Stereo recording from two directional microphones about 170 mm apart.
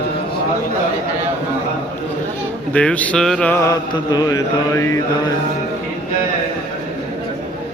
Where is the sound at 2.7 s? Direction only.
5° left (ahead or behind).